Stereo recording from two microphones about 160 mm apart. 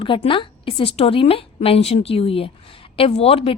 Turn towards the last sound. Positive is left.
turn(degrees=40)  # may be behind; listen again after turning